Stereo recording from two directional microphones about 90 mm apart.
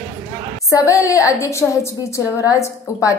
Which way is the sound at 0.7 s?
35° left (ahead or behind).